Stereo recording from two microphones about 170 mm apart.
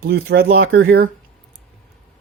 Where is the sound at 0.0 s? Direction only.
70° right (ahead or behind).